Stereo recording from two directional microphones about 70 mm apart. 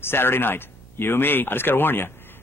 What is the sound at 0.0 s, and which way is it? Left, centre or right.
Speech, left.